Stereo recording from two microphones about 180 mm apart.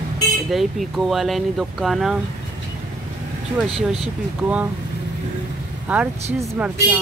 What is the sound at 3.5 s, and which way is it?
Speech, 5° right (ahead or behind).